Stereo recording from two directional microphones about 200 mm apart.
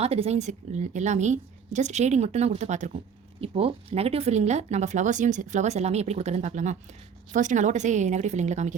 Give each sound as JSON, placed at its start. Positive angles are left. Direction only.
{"t": 0.0, "sound": "speech", "side_deg": -30}